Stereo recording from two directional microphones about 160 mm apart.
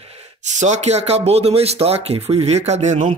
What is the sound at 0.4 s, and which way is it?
Speech, 45° right (ahead or behind).